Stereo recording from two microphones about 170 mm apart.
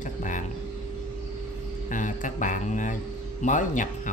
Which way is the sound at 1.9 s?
50° left (ahead or behind).